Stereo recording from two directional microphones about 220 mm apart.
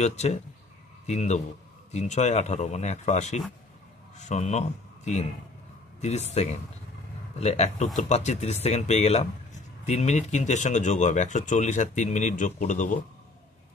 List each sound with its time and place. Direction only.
0.0 s a man's voice: 30° left (ahead or behind)